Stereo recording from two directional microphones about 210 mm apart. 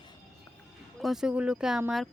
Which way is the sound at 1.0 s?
Centre (ahead or behind).